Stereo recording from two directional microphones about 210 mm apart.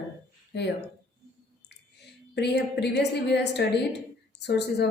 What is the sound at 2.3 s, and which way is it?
A woman's voice, 55° left (ahead or behind).